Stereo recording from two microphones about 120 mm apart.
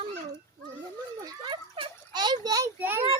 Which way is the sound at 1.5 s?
45° right (ahead or behind).